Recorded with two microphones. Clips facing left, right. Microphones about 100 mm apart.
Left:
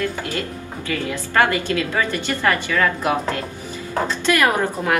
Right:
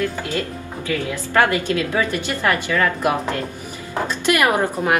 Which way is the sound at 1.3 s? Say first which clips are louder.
Right 1 dB; 20° right (ahead or behind).